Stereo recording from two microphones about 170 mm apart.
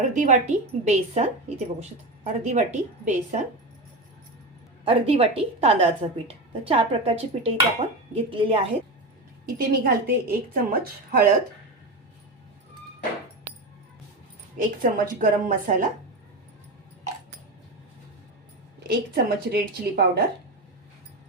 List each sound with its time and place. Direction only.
0.0 s speech: 45° right (ahead or behind)
4.9 s a woman's voice: 35° right (ahead or behind)
9.5 s a woman's voice: 60° right (ahead or behind)
14.6 s speech: 55° right (ahead or behind)
18.9 s a woman's voice: 70° right (ahead or behind)